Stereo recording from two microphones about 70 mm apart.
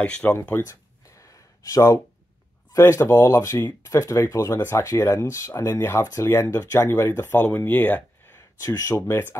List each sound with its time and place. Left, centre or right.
0.0 s speech: left
0.4 s speech: left
1.0 s gasp: left
2.8 s speech: left
5.8 s speech: left
8.4 s a sound: left
8.9 s speech: left